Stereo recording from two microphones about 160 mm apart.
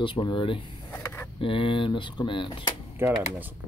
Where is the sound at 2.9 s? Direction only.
15° right (ahead or behind).